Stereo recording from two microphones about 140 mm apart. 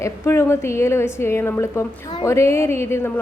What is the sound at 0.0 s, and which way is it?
A woman's voice, 20° left (ahead or behind).